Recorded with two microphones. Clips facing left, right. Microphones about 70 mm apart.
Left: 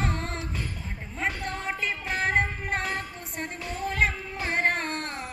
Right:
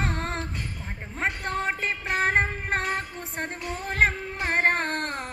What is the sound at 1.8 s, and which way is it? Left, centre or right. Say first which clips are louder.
Music: right 3 dB; right.